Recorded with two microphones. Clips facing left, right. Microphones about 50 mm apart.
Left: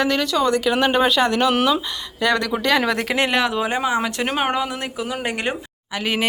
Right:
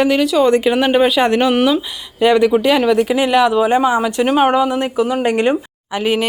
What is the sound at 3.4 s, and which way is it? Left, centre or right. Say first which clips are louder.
Speech: right 8 dB; centre.